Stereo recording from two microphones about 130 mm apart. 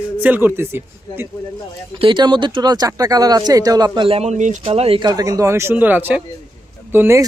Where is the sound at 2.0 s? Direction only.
35° right (ahead or behind).